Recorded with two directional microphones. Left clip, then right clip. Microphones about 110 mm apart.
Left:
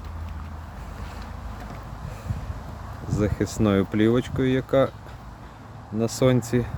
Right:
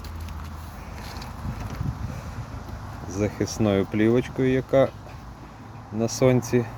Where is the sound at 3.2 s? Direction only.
35° left (ahead or behind).